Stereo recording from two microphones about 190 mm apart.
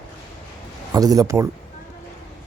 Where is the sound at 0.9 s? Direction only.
20° right (ahead or behind).